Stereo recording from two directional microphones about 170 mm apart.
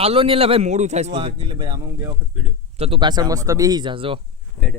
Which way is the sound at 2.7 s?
35° right (ahead or behind).